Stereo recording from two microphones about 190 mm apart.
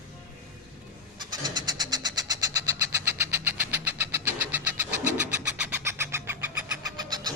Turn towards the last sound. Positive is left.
turn(degrees=-20)  # may be behind; listen again after turning